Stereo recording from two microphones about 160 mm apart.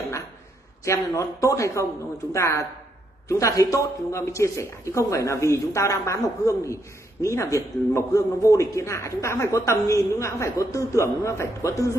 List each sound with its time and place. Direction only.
0.8 s speech: 20° left (ahead or behind)